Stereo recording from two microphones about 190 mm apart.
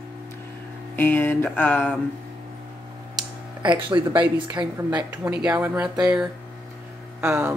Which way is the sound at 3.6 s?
25° right (ahead or behind).